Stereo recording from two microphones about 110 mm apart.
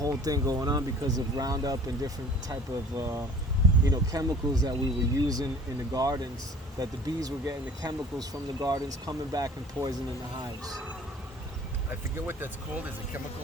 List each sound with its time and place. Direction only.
0.0 s speech: 35° right (ahead or behind)
12.1 s speech: 20° right (ahead or behind)